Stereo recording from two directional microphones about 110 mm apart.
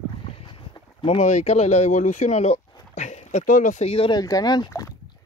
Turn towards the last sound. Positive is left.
turn(degrees=35)  # may be behind; listen again after turning